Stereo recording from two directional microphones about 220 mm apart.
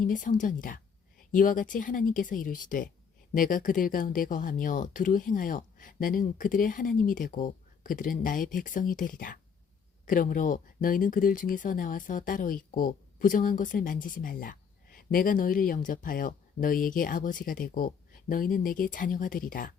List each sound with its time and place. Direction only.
0.0 s speech: 35° left (ahead or behind)